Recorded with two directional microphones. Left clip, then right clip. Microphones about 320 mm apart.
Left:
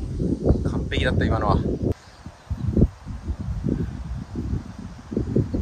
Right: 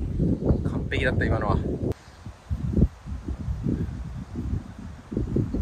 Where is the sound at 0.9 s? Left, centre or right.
Centre.